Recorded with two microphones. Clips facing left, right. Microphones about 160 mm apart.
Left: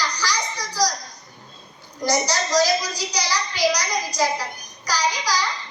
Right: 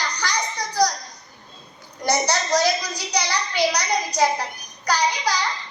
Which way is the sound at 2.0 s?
60° right (ahead or behind).